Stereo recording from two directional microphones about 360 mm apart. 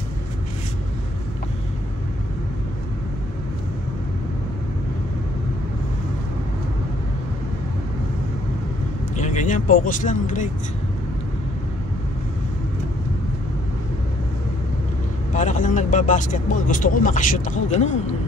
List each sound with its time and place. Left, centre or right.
9.1 s speech: centre
15.3 s speech: left